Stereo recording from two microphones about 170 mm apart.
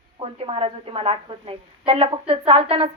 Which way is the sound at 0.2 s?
35° right (ahead or behind).